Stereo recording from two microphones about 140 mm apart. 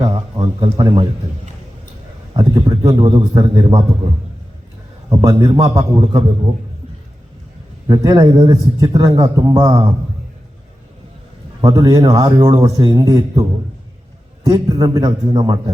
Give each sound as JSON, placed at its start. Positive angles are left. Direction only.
{"t": 0.0, "sound": "a sound", "side_deg": -30}
{"t": 2.3, "sound": "a man's voice", "side_deg": -30}
{"t": 7.9, "sound": "a man's voice", "side_deg": -30}
{"t": 11.6, "sound": "a man's voice", "side_deg": -25}
{"t": 14.4, "sound": "a man's voice", "side_deg": -30}